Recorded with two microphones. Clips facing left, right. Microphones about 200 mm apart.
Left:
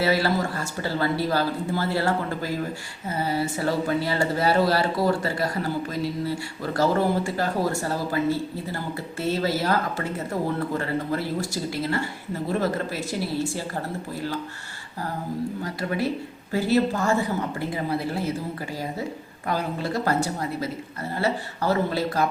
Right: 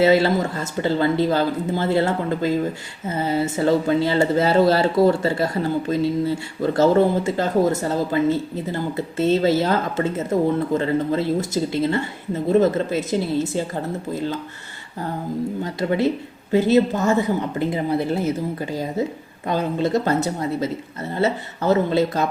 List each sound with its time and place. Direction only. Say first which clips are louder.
0.0 s speech: right 6 dB; 25° right (ahead or behind)
15.6 s speech: right 8 dB; 25° right (ahead or behind)